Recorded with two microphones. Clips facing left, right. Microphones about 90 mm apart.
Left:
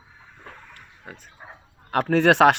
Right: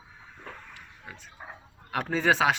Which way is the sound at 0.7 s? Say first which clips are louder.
Left 3 dB; 50° left (ahead or behind).